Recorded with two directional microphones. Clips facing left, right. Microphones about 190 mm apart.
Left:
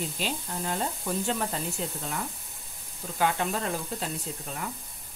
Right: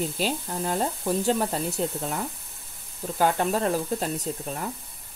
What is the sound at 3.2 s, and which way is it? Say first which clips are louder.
Speech: right 5 dB; 40° right (ahead or behind).